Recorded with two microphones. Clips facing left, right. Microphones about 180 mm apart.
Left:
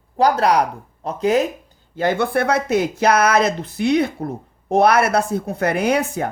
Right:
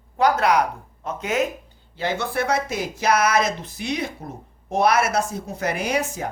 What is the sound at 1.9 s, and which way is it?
Speech, 50° left (ahead or behind).